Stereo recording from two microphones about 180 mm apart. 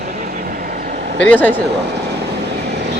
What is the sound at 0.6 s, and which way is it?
Vehicle, 50° right (ahead or behind).